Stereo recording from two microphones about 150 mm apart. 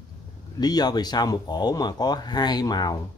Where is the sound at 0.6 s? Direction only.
25° left (ahead or behind).